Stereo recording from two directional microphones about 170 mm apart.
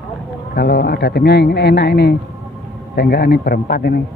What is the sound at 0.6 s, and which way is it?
A man's voice, 70° left (ahead or behind).